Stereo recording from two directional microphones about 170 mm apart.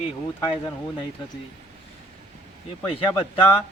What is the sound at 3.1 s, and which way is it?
Speech, 10° left (ahead or behind).